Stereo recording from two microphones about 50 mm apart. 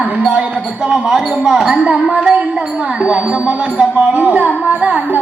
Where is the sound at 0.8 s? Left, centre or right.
Centre.